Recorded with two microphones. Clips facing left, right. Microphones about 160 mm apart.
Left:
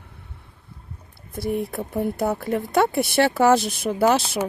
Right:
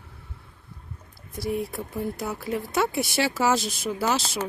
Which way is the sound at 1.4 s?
55° left (ahead or behind).